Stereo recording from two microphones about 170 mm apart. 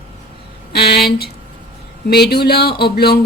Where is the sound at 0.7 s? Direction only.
70° left (ahead or behind).